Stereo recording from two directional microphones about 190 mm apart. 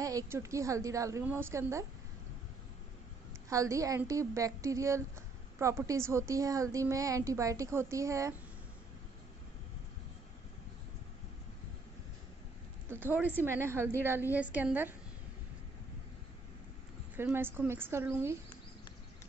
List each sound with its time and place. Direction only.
0.0 s a woman's voice: 15° right (ahead or behind)
3.4 s a woman's voice: 15° right (ahead or behind)
12.9 s a woman's voice: 10° right (ahead or behind)
17.2 s a woman's voice: 10° right (ahead or behind)